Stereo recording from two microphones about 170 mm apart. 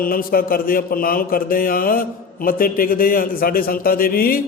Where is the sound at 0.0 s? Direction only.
60° left (ahead or behind).